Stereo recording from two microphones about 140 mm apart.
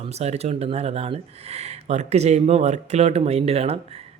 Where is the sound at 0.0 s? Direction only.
50° right (ahead or behind).